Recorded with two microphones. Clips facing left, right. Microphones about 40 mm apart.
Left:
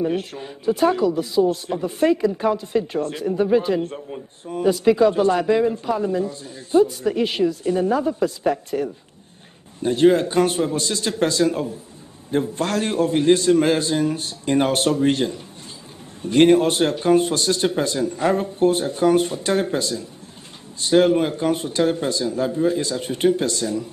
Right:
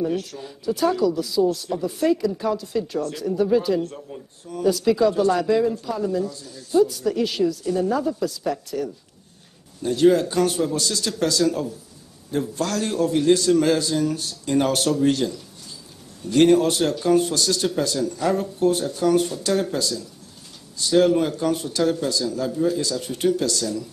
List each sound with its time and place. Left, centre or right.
0.0 s speech: left